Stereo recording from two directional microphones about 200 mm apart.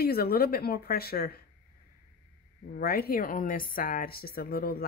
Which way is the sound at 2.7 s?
50° left (ahead or behind).